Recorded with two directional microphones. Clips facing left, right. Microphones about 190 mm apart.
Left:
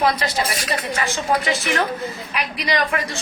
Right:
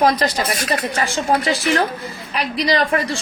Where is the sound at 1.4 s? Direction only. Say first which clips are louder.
Right 3 dB; 35° right (ahead or behind).